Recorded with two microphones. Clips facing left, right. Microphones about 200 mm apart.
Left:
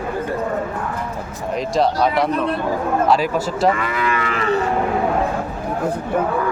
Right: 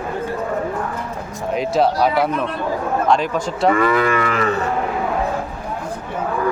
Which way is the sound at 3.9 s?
45° right (ahead or behind).